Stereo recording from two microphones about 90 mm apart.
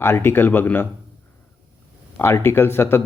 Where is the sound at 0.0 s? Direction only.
25° left (ahead or behind).